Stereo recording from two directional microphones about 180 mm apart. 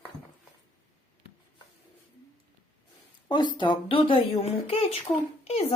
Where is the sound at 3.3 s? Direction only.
25° left (ahead or behind).